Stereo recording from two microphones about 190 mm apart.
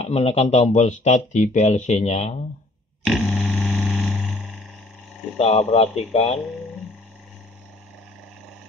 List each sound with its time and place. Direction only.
0.0 s speech: 35° left (ahead or behind)
3.0 s a sound: centre (ahead or behind)
4.4 s frog: 5° right (ahead or behind)
5.4 s speech: 35° left (ahead or behind)